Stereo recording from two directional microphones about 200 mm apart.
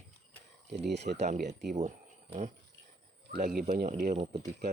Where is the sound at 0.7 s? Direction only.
55° right (ahead or behind).